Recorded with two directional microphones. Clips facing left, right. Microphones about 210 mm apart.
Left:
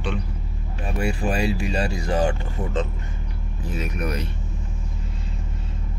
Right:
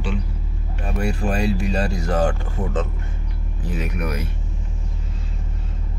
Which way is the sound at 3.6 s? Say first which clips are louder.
Right 1 dB; 15° right (ahead or behind).